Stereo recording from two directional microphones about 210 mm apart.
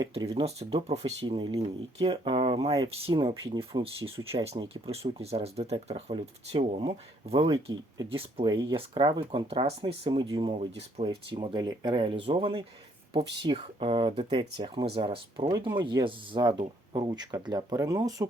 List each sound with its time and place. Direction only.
0.0 s speech: 25° right (ahead or behind)